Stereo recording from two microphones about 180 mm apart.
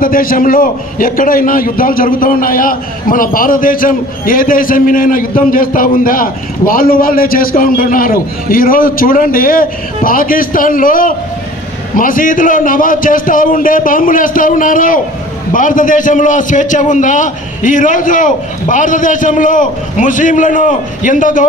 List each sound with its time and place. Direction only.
0.0 s a man's voice: 50° left (ahead or behind)